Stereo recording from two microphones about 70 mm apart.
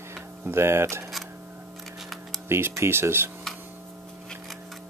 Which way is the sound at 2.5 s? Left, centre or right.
Right.